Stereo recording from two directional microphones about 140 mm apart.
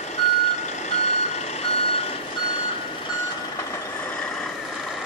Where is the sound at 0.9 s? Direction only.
50° left (ahead or behind).